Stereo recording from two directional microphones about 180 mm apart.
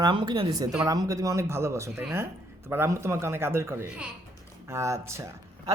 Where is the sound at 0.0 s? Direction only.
25° right (ahead or behind).